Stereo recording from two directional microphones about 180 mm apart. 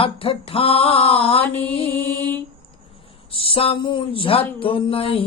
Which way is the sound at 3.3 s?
30° left (ahead or behind).